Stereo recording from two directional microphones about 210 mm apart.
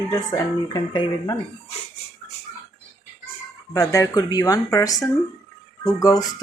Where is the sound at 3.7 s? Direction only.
15° left (ahead or behind).